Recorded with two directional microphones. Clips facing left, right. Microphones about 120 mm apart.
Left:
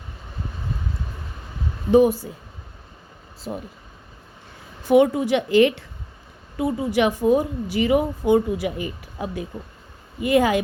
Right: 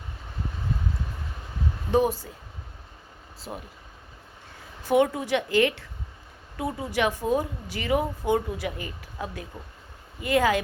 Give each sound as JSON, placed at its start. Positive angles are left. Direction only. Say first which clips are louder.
{"t": 1.9, "sound": "speech", "louder": "left 7 dB", "side_deg": 10}
{"t": 4.9, "sound": "a woman's voice", "louder": "left 6 dB", "side_deg": 15}